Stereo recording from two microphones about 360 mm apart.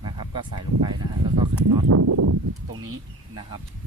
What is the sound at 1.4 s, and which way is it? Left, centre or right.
Speech, right.